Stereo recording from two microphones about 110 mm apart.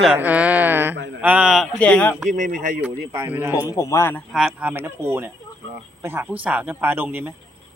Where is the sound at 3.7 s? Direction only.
30° left (ahead or behind).